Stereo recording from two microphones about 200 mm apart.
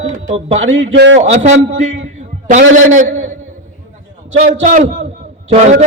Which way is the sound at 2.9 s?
40° right (ahead or behind).